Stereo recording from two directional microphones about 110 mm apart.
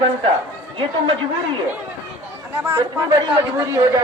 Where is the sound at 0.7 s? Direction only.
45° right (ahead or behind).